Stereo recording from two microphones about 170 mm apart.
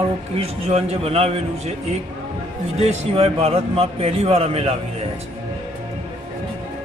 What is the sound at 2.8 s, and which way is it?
A man's voice, 35° right (ahead or behind).